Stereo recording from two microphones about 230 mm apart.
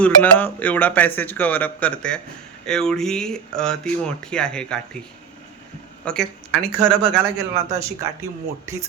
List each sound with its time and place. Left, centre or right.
0.0 s speech: centre
6.1 s speech: centre
7.5 s speech: right
8.2 s speech: centre